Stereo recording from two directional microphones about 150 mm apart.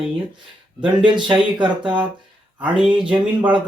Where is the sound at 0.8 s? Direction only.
30° right (ahead or behind).